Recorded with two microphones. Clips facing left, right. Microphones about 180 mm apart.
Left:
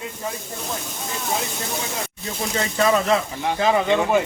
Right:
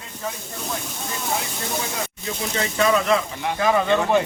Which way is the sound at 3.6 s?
15° left (ahead or behind).